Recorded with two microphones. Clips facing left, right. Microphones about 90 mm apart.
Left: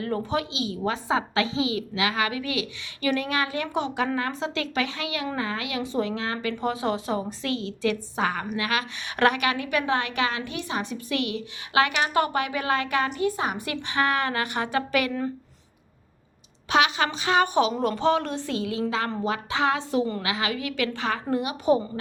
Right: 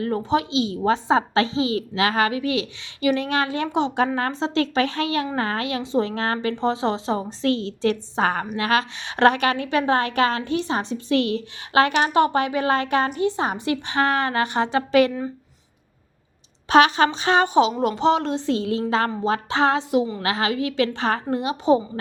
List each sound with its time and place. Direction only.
0.0 s a woman's voice: 25° right (ahead or behind); by 6.6 s 45° right (ahead or behind)
6.6 s a woman's voice: 25° right (ahead or behind)
16.6 s a woman's voice: 40° right (ahead or behind)
17.4 s a woman's voice: 20° right (ahead or behind)